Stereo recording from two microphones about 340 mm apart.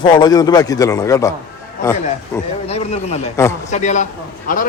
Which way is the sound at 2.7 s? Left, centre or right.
Centre.